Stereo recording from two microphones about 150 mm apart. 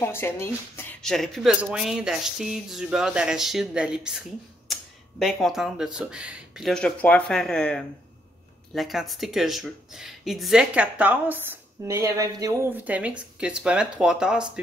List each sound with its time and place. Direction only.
0.0 s speech: 15° left (ahead or behind)
1.0 s speech: centre (ahead or behind); by 12.6 s 25° right (ahead or behind)
12.7 s speech: 10° right (ahead or behind)